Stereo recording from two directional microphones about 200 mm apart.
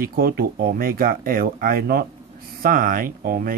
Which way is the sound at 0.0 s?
50° right (ahead or behind).